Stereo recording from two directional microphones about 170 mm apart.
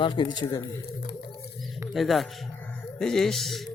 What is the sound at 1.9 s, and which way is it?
Speech, centre (ahead or behind).